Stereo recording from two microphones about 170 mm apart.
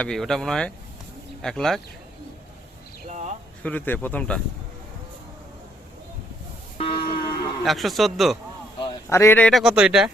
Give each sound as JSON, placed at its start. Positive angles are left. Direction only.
{"t": 0.0, "sound": "speech", "side_deg": 5}
{"t": 3.6, "sound": "speech", "side_deg": 10}
{"t": 6.7, "sound": "music", "side_deg": 30}
{"t": 7.6, "sound": "speech", "side_deg": 0}
{"t": 9.0, "sound": "speech", "side_deg": 15}